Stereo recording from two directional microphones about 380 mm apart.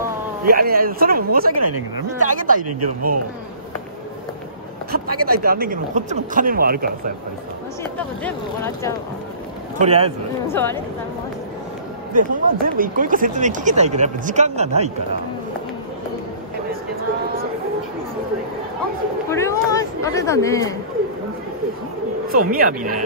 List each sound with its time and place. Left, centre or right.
0.5 s speech: right
4.9 s speech: right
7.8 s speech: centre
9.8 s speech: centre
10.5 s speech: centre
12.1 s speech: right
19.3 s speech: centre
22.3 s speech: right